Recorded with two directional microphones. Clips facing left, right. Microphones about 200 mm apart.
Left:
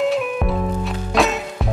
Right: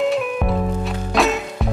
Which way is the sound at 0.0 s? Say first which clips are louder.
Even; centre (ahead or behind).